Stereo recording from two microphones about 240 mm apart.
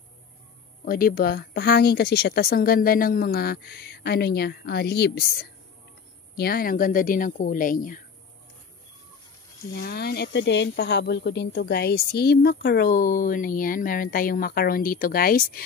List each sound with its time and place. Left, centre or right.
0.8 s speech: left
9.8 s speech: left